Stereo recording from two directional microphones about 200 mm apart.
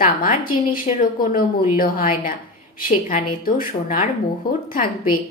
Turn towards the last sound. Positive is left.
turn(degrees=45)  # may be behind; listen again after turning